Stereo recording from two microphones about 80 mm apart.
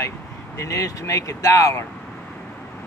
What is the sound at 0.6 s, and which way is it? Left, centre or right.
Speech, left.